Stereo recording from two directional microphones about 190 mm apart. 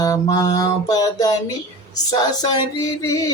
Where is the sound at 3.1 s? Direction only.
15° left (ahead or behind).